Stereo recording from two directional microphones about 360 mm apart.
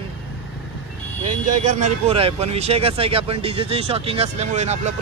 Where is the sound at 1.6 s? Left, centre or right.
Centre.